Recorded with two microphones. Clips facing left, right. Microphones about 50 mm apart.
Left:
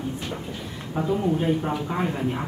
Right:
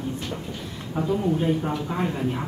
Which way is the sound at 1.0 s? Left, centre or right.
Left.